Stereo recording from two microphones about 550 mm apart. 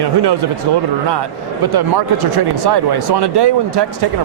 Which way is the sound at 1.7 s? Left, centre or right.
Right.